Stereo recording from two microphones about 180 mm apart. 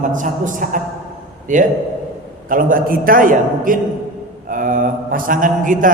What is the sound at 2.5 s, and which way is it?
A man's voice, 50° right (ahead or behind).